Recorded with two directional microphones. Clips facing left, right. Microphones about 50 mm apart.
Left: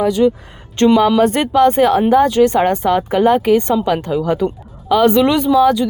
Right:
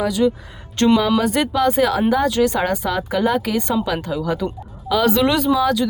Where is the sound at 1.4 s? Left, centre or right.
Left.